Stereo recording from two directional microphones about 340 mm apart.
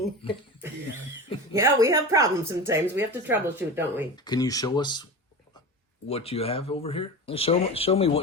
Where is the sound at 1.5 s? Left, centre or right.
Centre.